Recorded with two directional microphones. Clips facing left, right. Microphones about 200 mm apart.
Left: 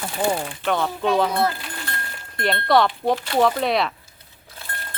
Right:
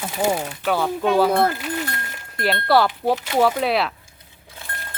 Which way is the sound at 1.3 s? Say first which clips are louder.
Right 3 dB; 50° right (ahead or behind).